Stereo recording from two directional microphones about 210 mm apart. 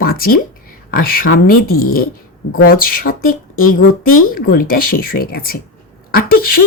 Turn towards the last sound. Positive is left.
turn(degrees=45)  # may be behind; listen again after turning